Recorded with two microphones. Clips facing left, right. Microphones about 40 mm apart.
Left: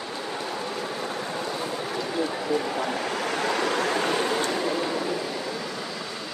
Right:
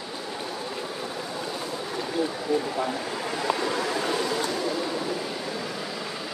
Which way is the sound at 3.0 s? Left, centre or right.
Left.